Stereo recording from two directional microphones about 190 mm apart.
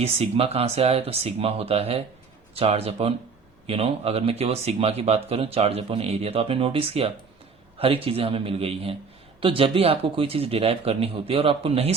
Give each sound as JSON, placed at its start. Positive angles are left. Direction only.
{"t": 0.0, "sound": "a man's voice", "side_deg": -30}